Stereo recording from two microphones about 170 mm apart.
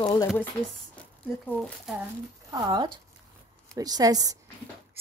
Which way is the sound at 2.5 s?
20° right (ahead or behind).